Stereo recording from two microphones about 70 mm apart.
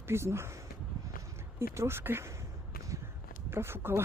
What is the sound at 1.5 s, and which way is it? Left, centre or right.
Speech, right.